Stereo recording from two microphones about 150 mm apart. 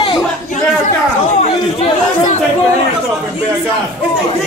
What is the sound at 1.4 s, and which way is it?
Chatter, 50° left (ahead or behind).